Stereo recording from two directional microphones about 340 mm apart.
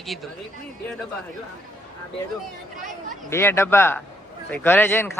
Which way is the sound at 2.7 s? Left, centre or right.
Right.